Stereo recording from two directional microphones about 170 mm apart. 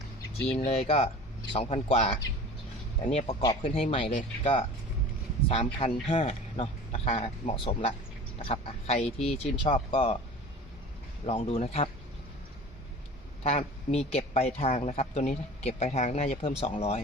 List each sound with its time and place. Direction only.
0.5 s speech: 35° left (ahead or behind)
3.4 s speech: 30° left (ahead or behind)
9.9 s speech: 30° left (ahead or behind)
11.3 s speech: 35° left (ahead or behind)
13.4 s a man's voice: 40° left (ahead or behind)